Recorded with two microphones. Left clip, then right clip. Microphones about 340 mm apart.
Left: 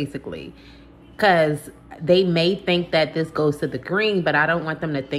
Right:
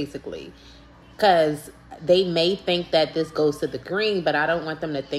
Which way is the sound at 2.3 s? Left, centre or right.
Centre.